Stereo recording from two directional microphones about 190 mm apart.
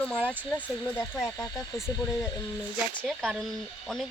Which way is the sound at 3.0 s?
Centre (ahead or behind).